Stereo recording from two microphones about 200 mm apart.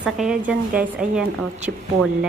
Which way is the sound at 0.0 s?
5° right (ahead or behind).